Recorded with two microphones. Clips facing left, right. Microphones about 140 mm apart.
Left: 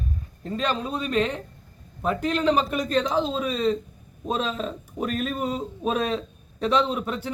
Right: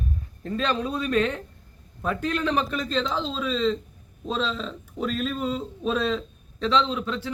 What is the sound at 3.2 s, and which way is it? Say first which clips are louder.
Speech: left 1 dB; 50° left (ahead or behind).